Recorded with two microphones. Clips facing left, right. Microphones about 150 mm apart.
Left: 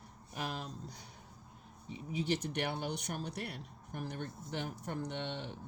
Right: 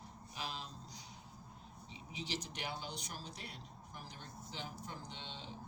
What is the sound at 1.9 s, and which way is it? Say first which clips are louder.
Speech: left 10 dB; 55° left (ahead or behind).